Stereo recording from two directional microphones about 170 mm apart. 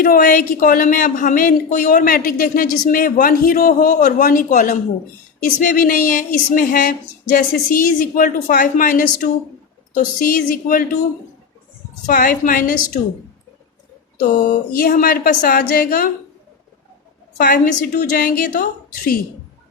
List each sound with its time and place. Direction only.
0.0 s a woman's voice: 55° left (ahead or behind)
12.0 s speech: 55° left (ahead or behind)
14.4 s speech: 55° left (ahead or behind)
17.3 s a woman's voice: 55° left (ahead or behind)